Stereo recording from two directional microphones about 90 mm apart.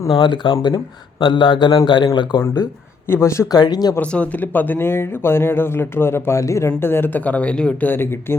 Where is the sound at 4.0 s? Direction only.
15° left (ahead or behind).